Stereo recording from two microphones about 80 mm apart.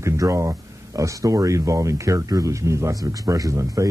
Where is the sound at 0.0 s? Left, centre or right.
Right.